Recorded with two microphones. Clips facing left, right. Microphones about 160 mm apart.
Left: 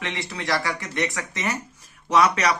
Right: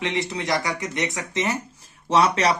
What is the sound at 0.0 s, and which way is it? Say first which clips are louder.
Speech: right 5 dB; 20° right (ahead or behind).